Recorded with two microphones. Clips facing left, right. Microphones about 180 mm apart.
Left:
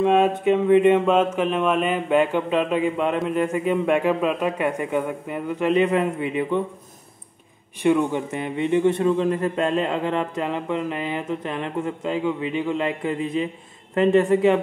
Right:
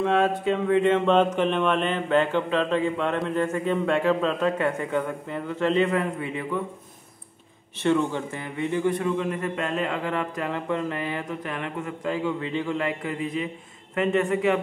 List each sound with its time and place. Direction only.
0.0 s speech: 15° left (ahead or behind)
7.8 s a man's voice: 15° left (ahead or behind); by 14.6 s 30° left (ahead or behind)